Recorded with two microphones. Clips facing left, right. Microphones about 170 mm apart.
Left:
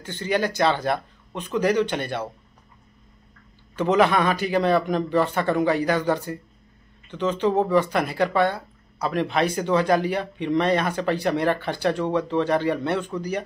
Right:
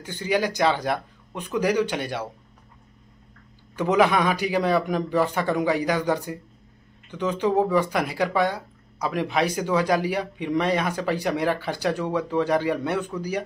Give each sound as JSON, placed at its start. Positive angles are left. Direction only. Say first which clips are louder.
{"t": 0.0, "sound": "speech", "louder": "even", "side_deg": -10}
{"t": 3.7, "sound": "speech", "louder": "left 1 dB", "side_deg": -10}